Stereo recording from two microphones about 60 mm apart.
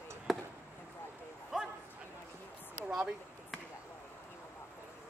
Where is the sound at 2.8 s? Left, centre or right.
Centre.